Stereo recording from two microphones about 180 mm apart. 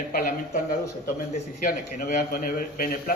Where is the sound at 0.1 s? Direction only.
55° left (ahead or behind).